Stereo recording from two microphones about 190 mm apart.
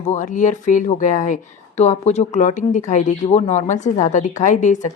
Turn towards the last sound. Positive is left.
turn(degrees=40)  # may be behind; listen again after turning